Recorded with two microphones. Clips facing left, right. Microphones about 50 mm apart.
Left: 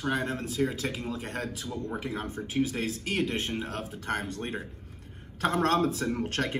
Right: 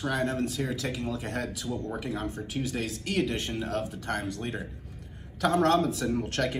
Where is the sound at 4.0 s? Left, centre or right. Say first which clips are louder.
Even; left.